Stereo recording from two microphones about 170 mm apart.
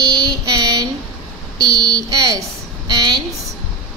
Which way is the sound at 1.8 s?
5° left (ahead or behind).